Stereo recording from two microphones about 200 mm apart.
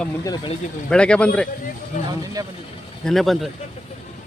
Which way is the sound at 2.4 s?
20° right (ahead or behind).